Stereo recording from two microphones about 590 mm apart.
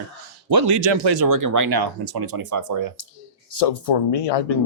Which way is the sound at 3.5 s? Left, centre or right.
Left.